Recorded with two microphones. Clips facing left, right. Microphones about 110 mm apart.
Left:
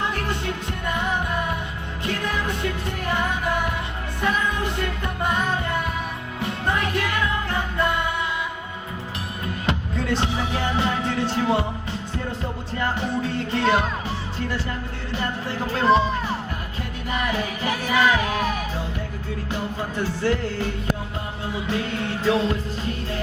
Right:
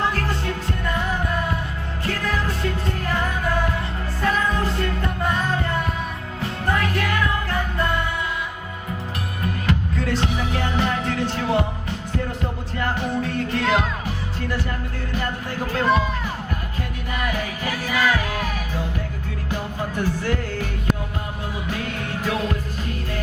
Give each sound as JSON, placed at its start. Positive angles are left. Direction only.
{"t": 0.1, "sound": "music", "side_deg": 20}
{"t": 6.4, "sound": "music", "side_deg": 20}
{"t": 9.6, "sound": "music", "side_deg": 20}
{"t": 15.1, "sound": "music", "side_deg": 20}
{"t": 17.1, "sound": "music", "side_deg": 25}
{"t": 19.5, "sound": "music", "side_deg": 20}